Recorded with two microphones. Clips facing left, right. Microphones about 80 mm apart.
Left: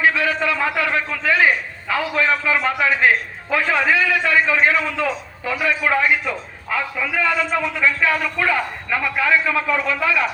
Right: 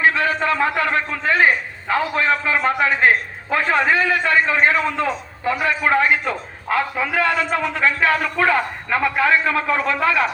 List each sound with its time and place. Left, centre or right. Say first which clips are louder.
0.0 s a man's voice: right 1 dB; right